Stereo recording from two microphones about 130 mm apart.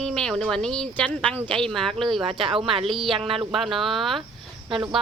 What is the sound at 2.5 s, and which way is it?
Speech, 45° right (ahead or behind).